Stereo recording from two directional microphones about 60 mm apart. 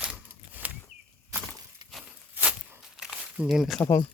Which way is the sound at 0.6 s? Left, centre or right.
Right.